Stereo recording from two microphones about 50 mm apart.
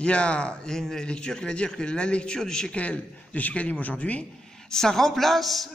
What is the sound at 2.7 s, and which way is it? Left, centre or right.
A man's voice, left.